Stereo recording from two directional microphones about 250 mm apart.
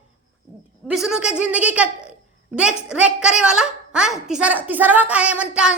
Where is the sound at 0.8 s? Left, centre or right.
Centre.